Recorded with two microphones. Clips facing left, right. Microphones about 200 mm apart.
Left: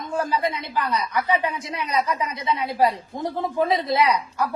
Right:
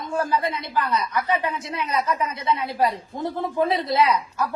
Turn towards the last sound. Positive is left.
turn(degrees=15)  # may be behind; listen again after turning